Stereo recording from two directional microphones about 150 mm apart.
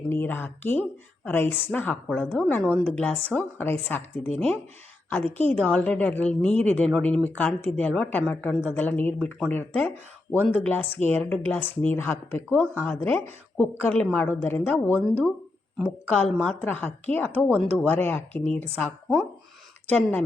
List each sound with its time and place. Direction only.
0.1 s speech: 15° left (ahead or behind)
19.9 s speech: 10° left (ahead or behind)